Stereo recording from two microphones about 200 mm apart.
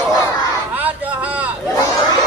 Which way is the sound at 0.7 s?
10° right (ahead or behind).